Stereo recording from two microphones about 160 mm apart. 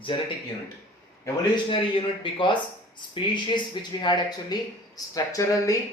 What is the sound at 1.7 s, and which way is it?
Speech, 30° left (ahead or behind).